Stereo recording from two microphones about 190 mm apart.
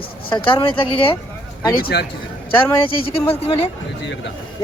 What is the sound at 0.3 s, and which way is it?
Speech, 25° left (ahead or behind).